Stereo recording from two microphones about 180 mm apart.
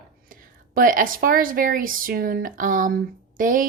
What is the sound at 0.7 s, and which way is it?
Speech, 50° right (ahead or behind).